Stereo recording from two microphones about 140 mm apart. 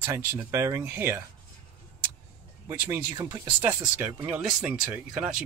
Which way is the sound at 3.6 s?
15° right (ahead or behind).